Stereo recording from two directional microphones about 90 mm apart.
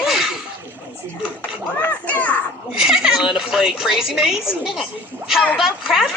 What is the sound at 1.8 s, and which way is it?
Children playing, 20° left (ahead or behind).